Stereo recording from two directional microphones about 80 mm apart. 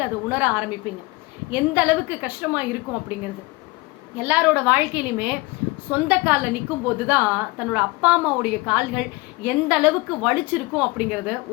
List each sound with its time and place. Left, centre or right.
0.0 s a woman's voice: right
4.2 s a woman's voice: right